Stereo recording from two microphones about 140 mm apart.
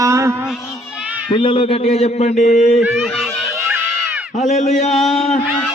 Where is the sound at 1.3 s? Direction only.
40° left (ahead or behind); by 2.8 s 55° left (ahead or behind).